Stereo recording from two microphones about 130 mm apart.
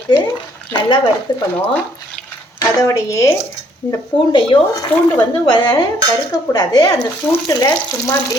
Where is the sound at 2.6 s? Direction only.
25° left (ahead or behind).